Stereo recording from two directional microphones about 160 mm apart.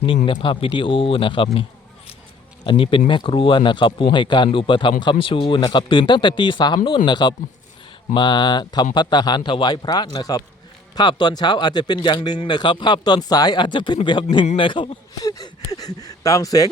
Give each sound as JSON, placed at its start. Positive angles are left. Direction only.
{"t": 0.3, "sound": "speech", "side_deg": 35}
{"t": 2.6, "sound": "speech", "side_deg": 35}